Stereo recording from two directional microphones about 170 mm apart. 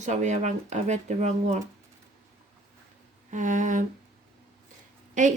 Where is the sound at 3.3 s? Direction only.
50° right (ahead or behind).